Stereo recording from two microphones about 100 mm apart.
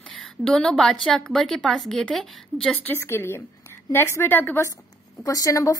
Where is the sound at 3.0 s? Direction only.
25° left (ahead or behind).